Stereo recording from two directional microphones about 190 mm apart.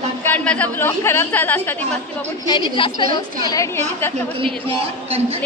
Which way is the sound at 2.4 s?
25° left (ahead or behind).